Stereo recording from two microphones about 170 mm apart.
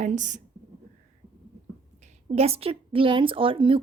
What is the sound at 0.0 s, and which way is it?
Speech, 45° right (ahead or behind).